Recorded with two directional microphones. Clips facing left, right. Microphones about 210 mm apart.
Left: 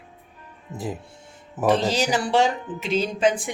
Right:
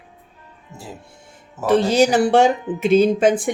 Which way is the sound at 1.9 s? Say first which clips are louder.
Right 7 dB; 50° right (ahead or behind).